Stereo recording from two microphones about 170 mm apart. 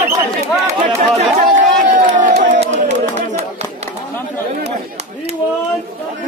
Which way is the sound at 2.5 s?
45° right (ahead or behind).